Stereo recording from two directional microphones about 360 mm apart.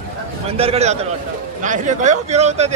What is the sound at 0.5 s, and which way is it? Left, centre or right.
A man's voice, centre.